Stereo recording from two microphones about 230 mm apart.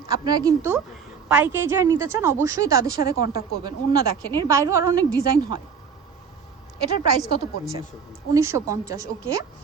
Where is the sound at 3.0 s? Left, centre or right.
Left.